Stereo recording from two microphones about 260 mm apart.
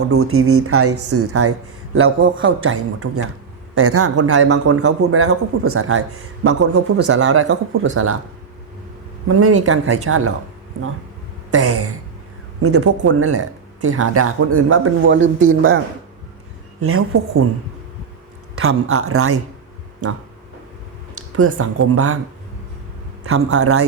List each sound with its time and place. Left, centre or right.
0.1 s a man's voice: right
9.4 s speech: right
11.5 s a man's voice: right
16.8 s a man's voice: right
18.6 s a man's voice: right
21.3 s a man's voice: right
23.2 s a man's voice: right